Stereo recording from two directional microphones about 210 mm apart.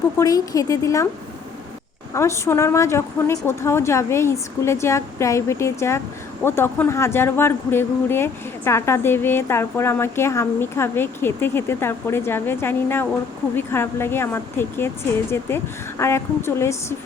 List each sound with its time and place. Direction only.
0.2 s speech: 15° left (ahead or behind)
2.1 s speech: 15° left (ahead or behind)